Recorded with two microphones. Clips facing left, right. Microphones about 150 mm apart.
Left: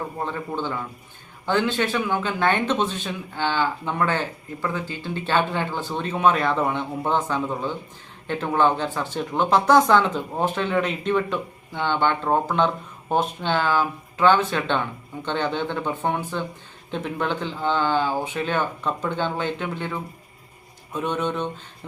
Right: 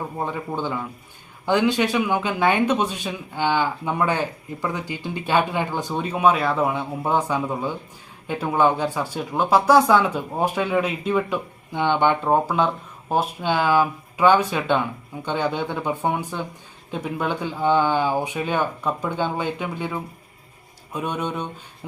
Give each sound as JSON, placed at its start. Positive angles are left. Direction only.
{"t": 0.2, "sound": "speech", "side_deg": -10}